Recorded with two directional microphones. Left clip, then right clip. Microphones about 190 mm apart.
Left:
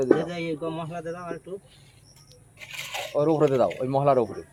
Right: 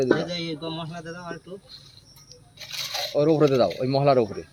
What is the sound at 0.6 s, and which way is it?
Speech, centre (ahead or behind).